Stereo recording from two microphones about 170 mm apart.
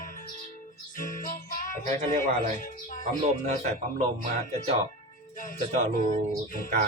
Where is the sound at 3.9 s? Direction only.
40° right (ahead or behind).